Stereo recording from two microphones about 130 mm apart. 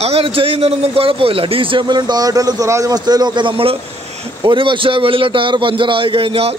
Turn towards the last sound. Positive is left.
turn(degrees=-45)  # may be behind; listen again after turning